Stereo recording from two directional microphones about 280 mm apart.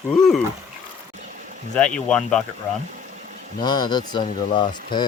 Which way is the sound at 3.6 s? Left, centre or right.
Centre.